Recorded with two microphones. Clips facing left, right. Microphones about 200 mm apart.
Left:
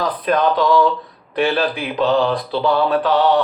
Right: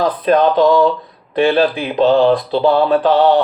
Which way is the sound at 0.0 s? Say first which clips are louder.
Right 5 dB; 25° right (ahead or behind).